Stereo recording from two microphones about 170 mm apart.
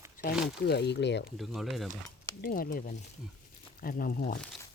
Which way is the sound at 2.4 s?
60° left (ahead or behind).